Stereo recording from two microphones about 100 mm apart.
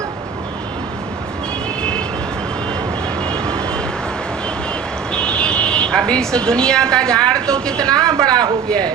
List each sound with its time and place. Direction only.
3.2 s vehicle: 10° left (ahead or behind)
5.1 s speech: 10° left (ahead or behind)
8.0 s a man's voice: 40° right (ahead or behind)